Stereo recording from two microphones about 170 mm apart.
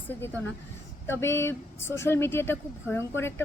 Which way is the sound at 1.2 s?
15° left (ahead or behind).